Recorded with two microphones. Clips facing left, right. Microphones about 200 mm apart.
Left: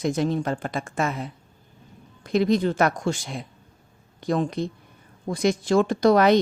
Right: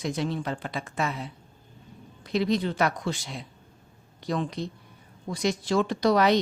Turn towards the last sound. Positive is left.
turn(degrees=50)  # may be behind; listen again after turning